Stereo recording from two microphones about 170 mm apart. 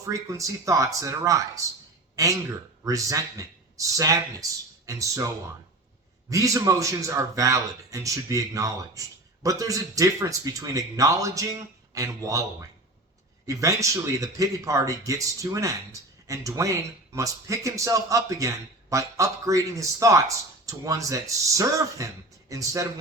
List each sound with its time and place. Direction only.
0.0 s a man's voice: 20° right (ahead or behind)
6.3 s a man's voice: 20° right (ahead or behind)